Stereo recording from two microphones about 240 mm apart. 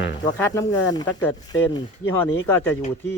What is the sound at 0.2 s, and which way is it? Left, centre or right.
Speech, centre.